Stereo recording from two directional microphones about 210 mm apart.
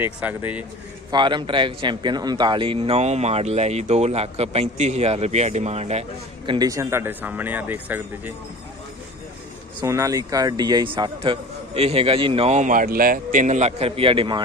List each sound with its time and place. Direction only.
0.0 s speech: 10° right (ahead or behind)
1.1 s a man's voice: 20° right (ahead or behind)
9.8 s a man's voice: 15° right (ahead or behind)